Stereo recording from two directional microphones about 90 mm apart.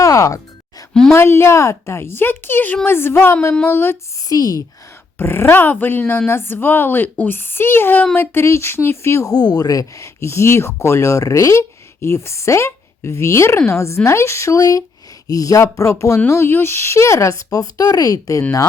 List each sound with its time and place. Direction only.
0.0 s music: 35° left (ahead or behind)
1.1 s speech: 25° left (ahead or behind)
4.3 s speech: 45° left (ahead or behind)
5.1 s speech: 25° left (ahead or behind)
9.3 s speech: 45° left (ahead or behind)